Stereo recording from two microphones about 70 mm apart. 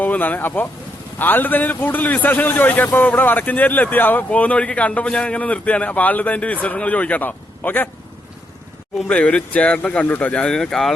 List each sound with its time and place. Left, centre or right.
0.0 s speech: left
9.0 s speech: centre